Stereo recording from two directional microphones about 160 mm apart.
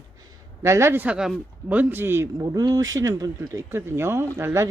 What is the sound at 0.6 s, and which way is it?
Speech, 15° right (ahead or behind).